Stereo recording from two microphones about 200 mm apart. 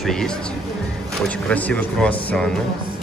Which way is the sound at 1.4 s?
5° left (ahead or behind).